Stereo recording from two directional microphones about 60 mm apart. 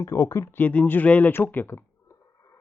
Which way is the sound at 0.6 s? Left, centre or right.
Left.